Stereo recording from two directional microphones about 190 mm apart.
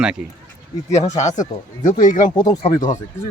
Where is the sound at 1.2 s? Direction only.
40° left (ahead or behind).